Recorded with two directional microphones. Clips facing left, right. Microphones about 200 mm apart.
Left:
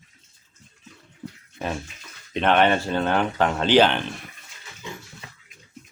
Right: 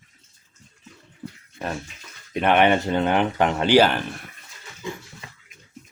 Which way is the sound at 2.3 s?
10° right (ahead or behind).